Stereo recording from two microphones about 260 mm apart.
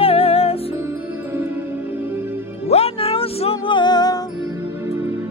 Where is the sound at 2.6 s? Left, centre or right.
Left.